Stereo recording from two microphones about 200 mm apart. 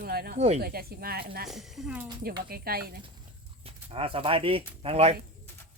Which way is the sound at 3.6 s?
25° right (ahead or behind).